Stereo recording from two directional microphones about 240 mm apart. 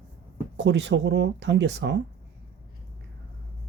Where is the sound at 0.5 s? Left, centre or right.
Right.